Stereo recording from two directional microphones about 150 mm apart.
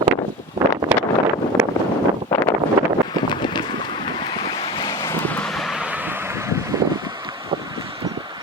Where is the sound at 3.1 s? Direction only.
30° left (ahead or behind).